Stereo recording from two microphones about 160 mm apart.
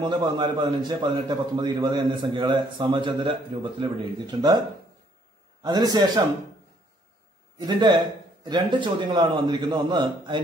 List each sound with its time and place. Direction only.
0.0 s a man's voice: 30° right (ahead or behind)
5.6 s a man's voice: 25° right (ahead or behind)
7.6 s a man's voice: 25° right (ahead or behind)